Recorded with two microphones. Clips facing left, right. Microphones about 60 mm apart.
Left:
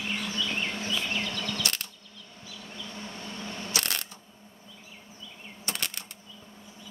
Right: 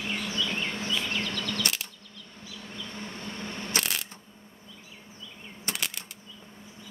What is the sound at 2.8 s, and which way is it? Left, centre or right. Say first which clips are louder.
Vehicle: right 1 dB; right.